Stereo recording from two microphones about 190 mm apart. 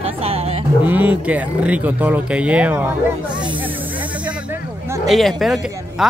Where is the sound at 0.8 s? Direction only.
10° right (ahead or behind).